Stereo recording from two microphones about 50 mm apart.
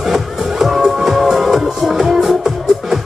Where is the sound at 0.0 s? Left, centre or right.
Centre.